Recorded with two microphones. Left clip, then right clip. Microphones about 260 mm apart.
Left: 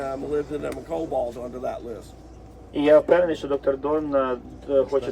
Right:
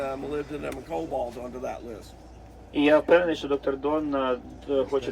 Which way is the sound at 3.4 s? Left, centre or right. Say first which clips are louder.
Left 3 dB; centre.